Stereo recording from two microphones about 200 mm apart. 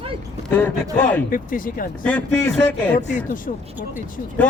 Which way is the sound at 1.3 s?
45° left (ahead or behind).